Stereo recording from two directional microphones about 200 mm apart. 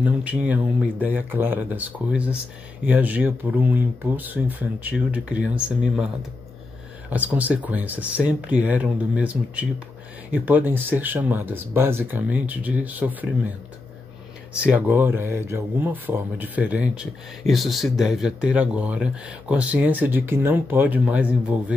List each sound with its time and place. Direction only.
0.0 s speech: 5° right (ahead or behind)
7.1 s speech: 10° right (ahead or behind)
14.7 s speech: 10° right (ahead or behind)